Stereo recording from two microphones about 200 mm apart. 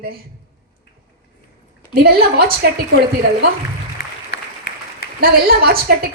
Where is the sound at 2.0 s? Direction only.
50° right (ahead or behind).